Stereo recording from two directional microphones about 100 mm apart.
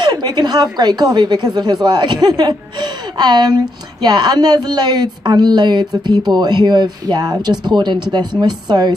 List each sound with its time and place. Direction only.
0.0 s a woman's voice: 45° right (ahead or behind)